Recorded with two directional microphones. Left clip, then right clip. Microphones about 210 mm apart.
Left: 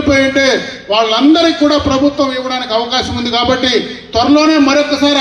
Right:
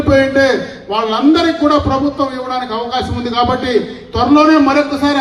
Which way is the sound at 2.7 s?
50° right (ahead or behind).